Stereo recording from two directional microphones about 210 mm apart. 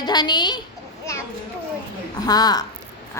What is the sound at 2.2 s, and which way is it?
Speech, 20° left (ahead or behind).